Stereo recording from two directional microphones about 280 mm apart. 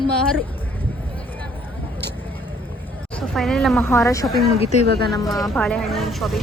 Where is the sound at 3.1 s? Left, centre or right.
Centre.